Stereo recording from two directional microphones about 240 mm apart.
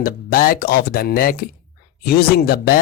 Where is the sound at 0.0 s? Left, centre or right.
Left.